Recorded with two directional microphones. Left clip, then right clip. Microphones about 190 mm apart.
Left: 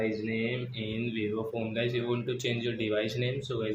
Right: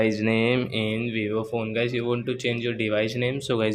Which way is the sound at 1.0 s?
30° right (ahead or behind).